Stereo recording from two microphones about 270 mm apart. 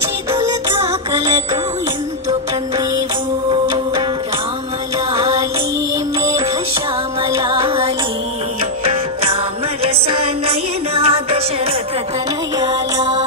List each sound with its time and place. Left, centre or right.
7.4 s music: centre
12.5 s music: centre